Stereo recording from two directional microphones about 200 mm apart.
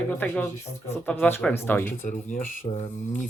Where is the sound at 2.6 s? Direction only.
25° left (ahead or behind).